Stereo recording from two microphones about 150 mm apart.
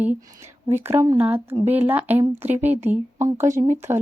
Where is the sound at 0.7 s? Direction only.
15° right (ahead or behind).